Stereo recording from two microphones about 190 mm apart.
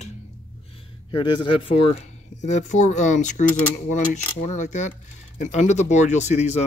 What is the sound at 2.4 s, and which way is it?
Speech, 40° left (ahead or behind).